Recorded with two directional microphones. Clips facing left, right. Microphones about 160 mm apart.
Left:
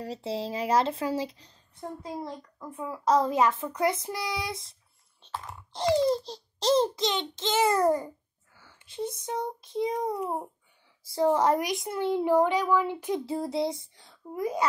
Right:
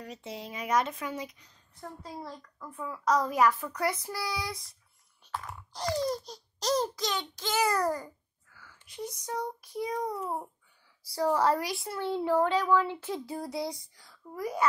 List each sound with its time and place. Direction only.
0.0 s speech: 30° left (ahead or behind)